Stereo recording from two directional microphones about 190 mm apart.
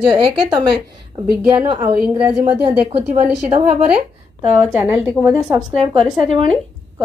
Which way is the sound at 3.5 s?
45° right (ahead or behind).